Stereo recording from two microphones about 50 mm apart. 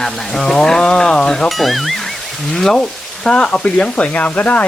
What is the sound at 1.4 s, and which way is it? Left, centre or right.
Speech, centre.